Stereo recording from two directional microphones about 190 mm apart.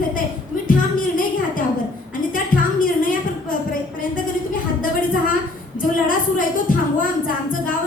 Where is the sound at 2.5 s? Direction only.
45° left (ahead or behind).